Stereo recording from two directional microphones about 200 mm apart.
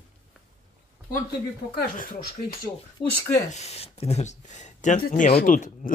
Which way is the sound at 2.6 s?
20° left (ahead or behind).